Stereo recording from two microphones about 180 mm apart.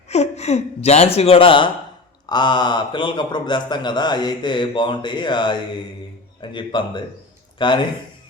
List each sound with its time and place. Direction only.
0.1 s a man's voice: 35° left (ahead or behind)